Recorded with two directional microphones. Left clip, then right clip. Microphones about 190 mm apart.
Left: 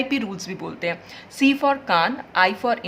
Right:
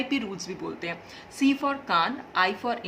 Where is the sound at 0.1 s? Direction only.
35° left (ahead or behind).